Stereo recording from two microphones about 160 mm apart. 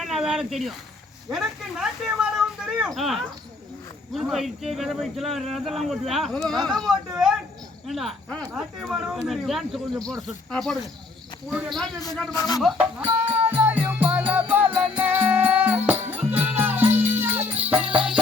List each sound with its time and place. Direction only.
0.0 s speech: centre (ahead or behind)
11.5 s speech: 10° right (ahead or behind)
12.3 s speech: 20° left (ahead or behind)
12.5 s speech: 5° right (ahead or behind)
13.5 s music: 10° right (ahead or behind)